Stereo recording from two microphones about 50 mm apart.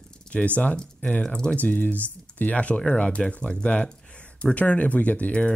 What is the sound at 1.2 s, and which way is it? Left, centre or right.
Speech, centre.